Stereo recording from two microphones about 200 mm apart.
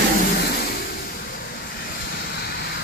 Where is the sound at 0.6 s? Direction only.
50° left (ahead or behind).